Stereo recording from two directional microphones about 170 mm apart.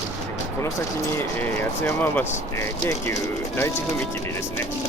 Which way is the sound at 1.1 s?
10° left (ahead or behind).